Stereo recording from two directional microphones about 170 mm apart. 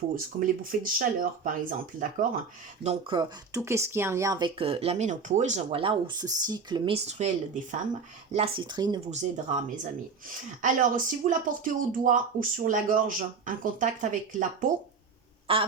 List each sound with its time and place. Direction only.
0.3 s speech: 55° right (ahead or behind)
2.8 s speech: 40° right (ahead or behind)
3.2 s speech: 20° right (ahead or behind); by 5.8 s 45° right (ahead or behind)
5.8 s speech: 30° right (ahead or behind)
8.7 s speech: 25° right (ahead or behind)
9.0 s speech: 45° right (ahead or behind)
15.5 s speech: 35° right (ahead or behind)